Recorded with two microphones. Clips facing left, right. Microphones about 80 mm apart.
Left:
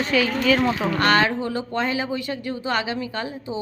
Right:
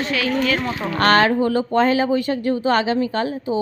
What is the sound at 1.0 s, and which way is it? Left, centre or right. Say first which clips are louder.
Speech: right 6 dB; right.